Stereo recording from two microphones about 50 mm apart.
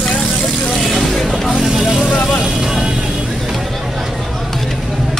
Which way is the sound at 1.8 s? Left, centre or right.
Centre.